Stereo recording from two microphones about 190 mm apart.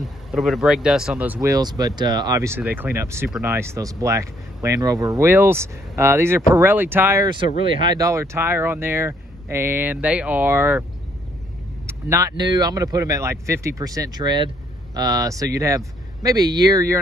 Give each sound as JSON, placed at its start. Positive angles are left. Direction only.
{"t": 0.0, "sound": "speech", "side_deg": 0}
{"t": 7.2, "sound": "speech", "side_deg": -25}
{"t": 11.8, "sound": "speech", "side_deg": -15}